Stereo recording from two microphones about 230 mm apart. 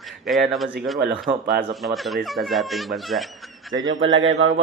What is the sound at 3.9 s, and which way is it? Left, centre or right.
Speech, right.